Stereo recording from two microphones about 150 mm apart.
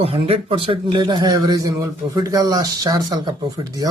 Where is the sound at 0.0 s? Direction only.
40° right (ahead or behind).